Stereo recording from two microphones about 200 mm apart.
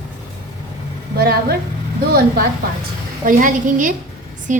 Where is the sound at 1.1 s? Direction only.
50° right (ahead or behind).